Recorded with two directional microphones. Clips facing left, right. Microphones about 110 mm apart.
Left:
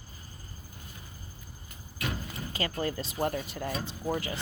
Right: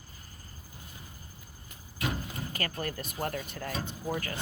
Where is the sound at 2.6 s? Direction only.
20° left (ahead or behind).